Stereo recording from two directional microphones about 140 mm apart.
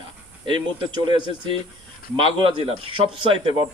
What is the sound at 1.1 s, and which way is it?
A man's voice, 35° right (ahead or behind).